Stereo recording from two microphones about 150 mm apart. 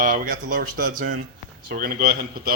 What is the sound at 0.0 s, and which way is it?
Speech, 60° right (ahead or behind).